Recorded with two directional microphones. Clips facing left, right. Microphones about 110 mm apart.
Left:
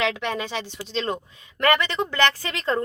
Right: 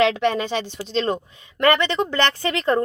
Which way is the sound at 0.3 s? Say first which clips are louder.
Right 5 dB; 30° right (ahead or behind).